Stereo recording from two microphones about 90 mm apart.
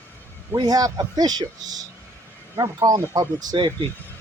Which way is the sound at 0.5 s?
50° right (ahead or behind).